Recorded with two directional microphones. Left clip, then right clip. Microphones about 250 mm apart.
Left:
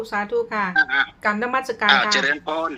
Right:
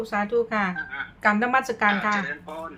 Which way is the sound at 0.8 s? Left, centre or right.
Left.